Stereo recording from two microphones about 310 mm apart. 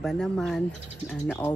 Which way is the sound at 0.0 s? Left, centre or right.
Centre.